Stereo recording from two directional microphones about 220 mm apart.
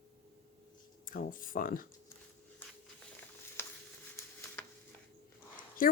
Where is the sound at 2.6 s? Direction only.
10° left (ahead or behind).